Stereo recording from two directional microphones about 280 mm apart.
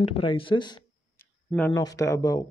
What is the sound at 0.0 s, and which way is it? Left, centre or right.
Speech, centre.